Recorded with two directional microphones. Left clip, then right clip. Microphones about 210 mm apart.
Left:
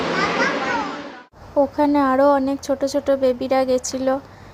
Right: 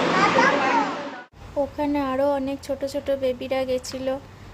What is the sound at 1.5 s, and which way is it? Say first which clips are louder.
A woman's voice: left 7 dB; 20° left (ahead or behind).